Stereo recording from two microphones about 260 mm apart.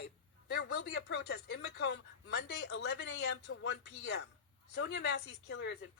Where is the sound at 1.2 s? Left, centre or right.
Left.